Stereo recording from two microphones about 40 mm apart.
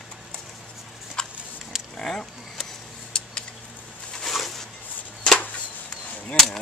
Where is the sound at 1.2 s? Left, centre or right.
Centre.